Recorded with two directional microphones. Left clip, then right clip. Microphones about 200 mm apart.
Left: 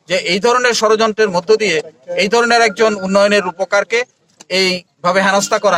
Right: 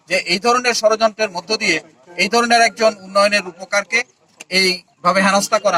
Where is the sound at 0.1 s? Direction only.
20° left (ahead or behind).